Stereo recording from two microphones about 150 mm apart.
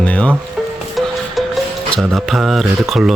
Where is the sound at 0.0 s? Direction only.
10° left (ahead or behind).